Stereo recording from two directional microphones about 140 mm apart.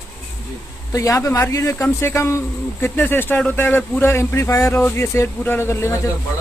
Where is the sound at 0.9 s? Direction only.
20° left (ahead or behind).